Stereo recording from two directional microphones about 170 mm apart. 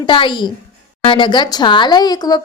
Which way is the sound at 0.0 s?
30° left (ahead or behind).